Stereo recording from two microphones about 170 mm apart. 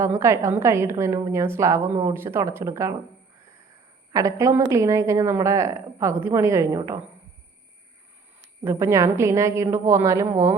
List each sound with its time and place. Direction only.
0.0 s a woman's voice: 15° right (ahead or behind)
4.1 s a woman's voice: 20° right (ahead or behind)
8.4 s a woman's voice: 15° right (ahead or behind)